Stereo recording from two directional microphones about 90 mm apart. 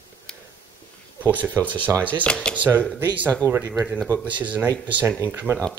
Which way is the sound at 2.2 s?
10° left (ahead or behind).